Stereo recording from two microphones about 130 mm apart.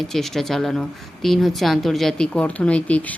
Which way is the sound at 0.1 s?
Centre (ahead or behind).